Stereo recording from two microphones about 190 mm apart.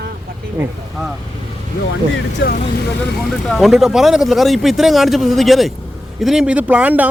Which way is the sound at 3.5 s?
Centre (ahead or behind).